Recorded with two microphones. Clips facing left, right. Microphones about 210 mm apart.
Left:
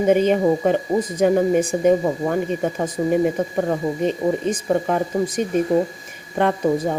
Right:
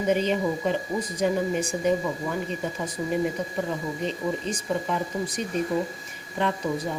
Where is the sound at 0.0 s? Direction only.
50° left (ahead or behind).